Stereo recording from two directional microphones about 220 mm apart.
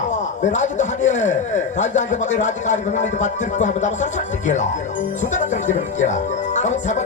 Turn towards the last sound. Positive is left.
turn(degrees=35)  # may be behind; listen again after turning